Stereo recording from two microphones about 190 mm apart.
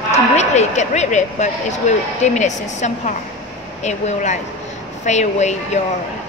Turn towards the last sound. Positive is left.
turn(degrees=35)  # may be behind; listen again after turning